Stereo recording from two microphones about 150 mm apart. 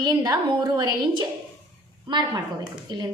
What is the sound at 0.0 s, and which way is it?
Speech, 25° right (ahead or behind).